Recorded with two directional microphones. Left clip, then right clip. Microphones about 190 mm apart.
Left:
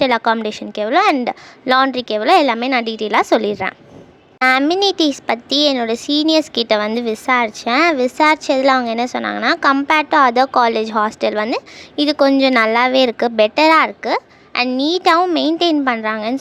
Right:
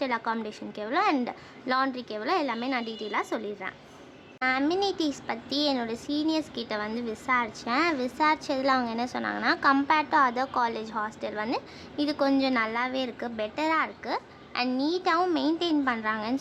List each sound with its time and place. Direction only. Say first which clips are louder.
0.0 s a woman's voice: left 14 dB; 45° left (ahead or behind)